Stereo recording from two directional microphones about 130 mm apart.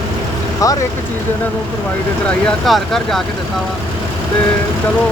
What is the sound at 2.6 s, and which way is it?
Speech, centre (ahead or behind).